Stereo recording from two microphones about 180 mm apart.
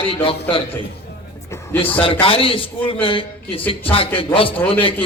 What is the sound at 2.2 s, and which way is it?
A man's voice, 30° left (ahead or behind).